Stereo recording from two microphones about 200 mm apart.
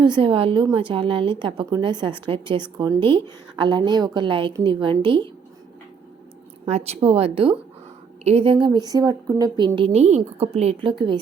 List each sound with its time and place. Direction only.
0.0 s a woman's voice: 25° right (ahead or behind)
6.7 s a woman's voice: 35° right (ahead or behind)